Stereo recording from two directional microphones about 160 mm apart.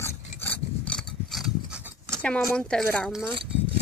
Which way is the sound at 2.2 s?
5° left (ahead or behind).